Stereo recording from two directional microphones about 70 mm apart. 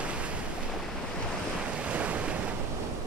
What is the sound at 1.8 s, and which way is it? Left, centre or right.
Waves, centre.